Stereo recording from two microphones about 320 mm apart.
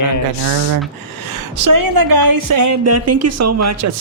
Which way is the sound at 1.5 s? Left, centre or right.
Right.